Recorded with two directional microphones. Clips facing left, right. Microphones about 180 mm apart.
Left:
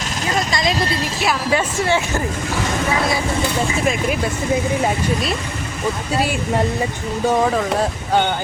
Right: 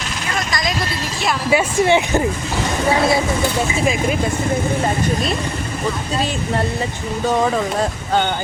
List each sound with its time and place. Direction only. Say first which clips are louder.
0.3 s vehicle: left 2 dB; 25° left (ahead or behind)
1.5 s speech: right 6 dB; 15° right (ahead or behind)
3.8 s speech: right 2 dB; centre (ahead or behind)
6.1 s speech: left 3 dB; 10° left (ahead or behind)